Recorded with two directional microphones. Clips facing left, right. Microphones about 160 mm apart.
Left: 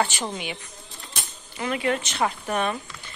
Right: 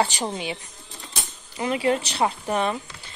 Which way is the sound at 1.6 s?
25° right (ahead or behind).